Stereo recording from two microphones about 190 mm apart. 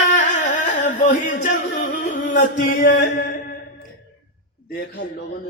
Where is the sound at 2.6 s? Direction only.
50° left (ahead or behind).